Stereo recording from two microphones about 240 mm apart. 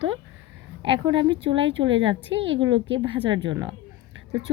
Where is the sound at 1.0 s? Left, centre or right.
Centre.